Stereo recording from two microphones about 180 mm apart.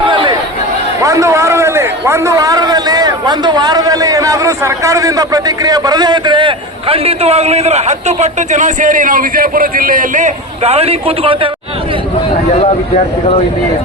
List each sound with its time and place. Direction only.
0.0 s chatter: 25° right (ahead or behind)
1.0 s a man's voice: 15° right (ahead or behind)